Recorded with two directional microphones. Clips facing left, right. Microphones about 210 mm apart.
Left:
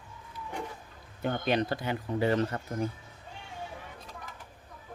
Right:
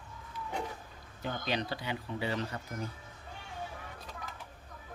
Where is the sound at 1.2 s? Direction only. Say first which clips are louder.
Left 7 dB; 55° left (ahead or behind).